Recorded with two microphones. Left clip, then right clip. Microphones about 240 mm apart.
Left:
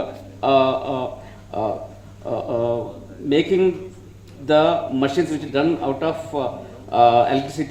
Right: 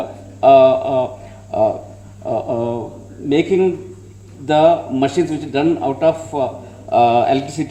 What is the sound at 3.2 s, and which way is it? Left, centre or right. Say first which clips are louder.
A man's voice: right 2 dB; right.